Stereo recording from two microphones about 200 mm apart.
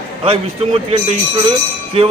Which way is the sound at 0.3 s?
30° right (ahead or behind).